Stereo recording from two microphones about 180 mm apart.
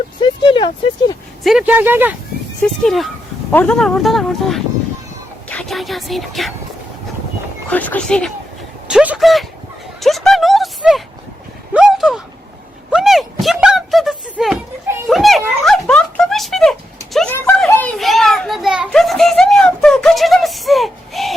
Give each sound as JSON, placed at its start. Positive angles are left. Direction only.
{"t": 0.2, "sound": "speech", "side_deg": 25}
{"t": 1.5, "sound": "speech", "side_deg": -5}
{"t": 2.8, "sound": "speech", "side_deg": 0}
{"t": 7.7, "sound": "speech", "side_deg": 10}
{"t": 10.0, "sound": "a sound", "side_deg": 0}
{"t": 17.3, "sound": "children playing", "side_deg": 10}